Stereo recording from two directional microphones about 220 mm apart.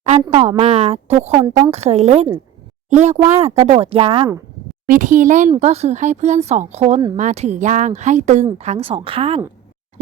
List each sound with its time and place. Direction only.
0.0 s speech: 30° right (ahead or behind)
4.9 s speech: 35° right (ahead or behind)